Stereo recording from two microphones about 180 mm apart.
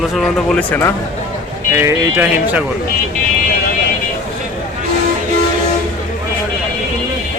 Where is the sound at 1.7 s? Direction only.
15° right (ahead or behind).